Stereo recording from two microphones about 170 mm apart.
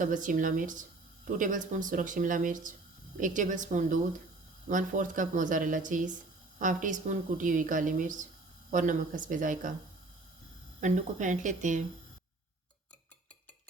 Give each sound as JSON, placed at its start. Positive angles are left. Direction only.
{"t": 0.0, "sound": "a woman's voice", "side_deg": -50}
{"t": 10.8, "sound": "a woman's voice", "side_deg": -45}